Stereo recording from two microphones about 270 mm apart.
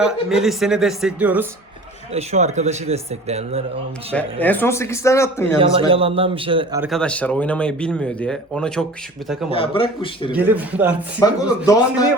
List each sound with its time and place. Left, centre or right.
0.0 s speech: centre
2.1 s speech: right
4.1 s speech: centre
5.9 s speech: right
6.9 s speech: centre
9.5 s a man's voice: centre
10.3 s speech: centre
11.2 s speech: centre